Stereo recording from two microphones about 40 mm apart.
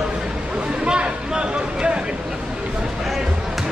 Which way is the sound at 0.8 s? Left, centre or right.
Right.